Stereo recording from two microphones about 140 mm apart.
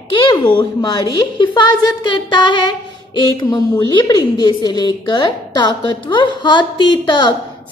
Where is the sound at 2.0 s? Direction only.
35° left (ahead or behind).